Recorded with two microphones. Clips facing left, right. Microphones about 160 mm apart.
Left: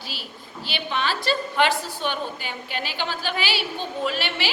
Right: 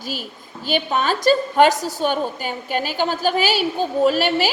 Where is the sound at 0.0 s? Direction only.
45° right (ahead or behind).